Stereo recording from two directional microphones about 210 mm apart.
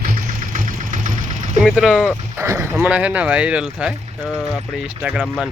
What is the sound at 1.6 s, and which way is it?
Speech, centre (ahead or behind).